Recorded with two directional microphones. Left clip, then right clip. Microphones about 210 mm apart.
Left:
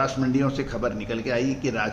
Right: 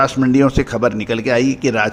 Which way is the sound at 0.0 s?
40° right (ahead or behind).